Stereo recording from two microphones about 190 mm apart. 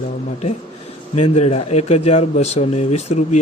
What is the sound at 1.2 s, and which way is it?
Speech, 30° left (ahead or behind).